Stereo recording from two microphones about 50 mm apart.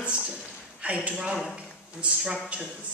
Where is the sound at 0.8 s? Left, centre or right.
Right.